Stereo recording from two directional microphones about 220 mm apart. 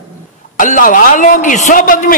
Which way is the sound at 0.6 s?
35° left (ahead or behind).